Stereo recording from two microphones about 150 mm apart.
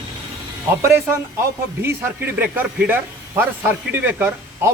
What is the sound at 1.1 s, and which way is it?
A man's voice, 15° right (ahead or behind).